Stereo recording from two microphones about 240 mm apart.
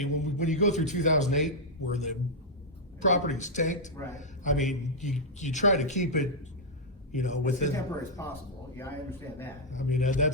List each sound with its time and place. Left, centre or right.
0.0 s a man's voice: left
8.2 s a man's voice: centre
9.7 s a man's voice: left